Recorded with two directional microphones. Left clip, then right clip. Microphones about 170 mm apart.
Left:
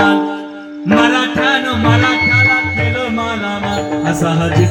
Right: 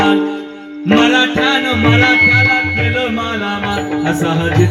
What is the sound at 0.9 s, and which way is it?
Music, 20° right (ahead or behind).